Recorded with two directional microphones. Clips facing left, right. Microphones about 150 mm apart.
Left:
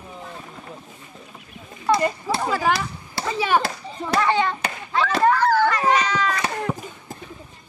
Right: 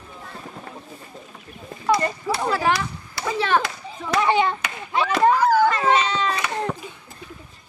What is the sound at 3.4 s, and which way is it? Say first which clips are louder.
Speech: even; 10° left (ahead or behind).